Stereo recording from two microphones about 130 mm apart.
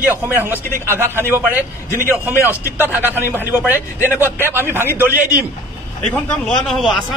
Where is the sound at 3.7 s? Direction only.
15° left (ahead or behind).